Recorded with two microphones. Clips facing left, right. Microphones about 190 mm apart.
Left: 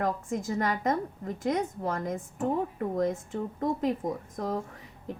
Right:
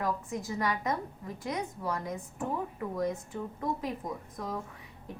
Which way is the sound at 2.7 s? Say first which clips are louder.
Left 4 dB; 50° left (ahead or behind).